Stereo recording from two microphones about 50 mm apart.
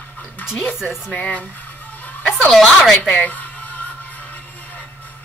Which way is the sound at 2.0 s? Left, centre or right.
Left.